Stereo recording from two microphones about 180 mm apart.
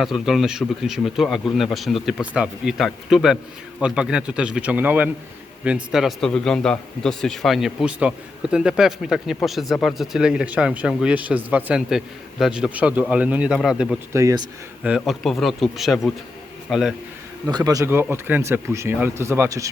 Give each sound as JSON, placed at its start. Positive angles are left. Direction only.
{"t": 0.0, "sound": "speech", "side_deg": 0}
{"t": 14.1, "sound": "speech", "side_deg": -15}
{"t": 14.8, "sound": "a man's voice", "side_deg": -5}
{"t": 17.4, "sound": "speech", "side_deg": -20}